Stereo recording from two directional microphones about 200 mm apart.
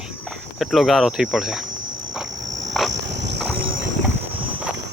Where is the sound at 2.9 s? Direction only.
60° right (ahead or behind).